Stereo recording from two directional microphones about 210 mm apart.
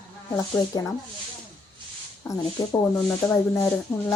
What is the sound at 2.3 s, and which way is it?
Speech, 15° left (ahead or behind).